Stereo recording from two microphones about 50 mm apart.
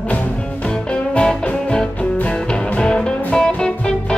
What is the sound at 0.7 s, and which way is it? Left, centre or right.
Music, centre.